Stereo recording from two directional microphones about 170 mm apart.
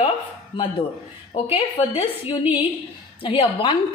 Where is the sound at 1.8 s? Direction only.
35° left (ahead or behind).